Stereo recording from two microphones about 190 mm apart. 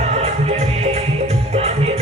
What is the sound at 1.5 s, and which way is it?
Music, 35° right (ahead or behind).